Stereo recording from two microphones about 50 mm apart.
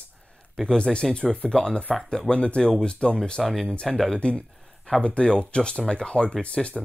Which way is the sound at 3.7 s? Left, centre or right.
Centre.